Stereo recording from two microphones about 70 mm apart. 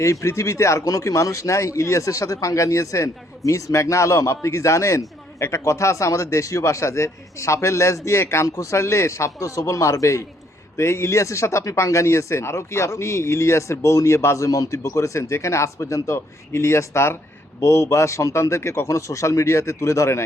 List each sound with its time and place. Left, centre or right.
0.0 s speech: left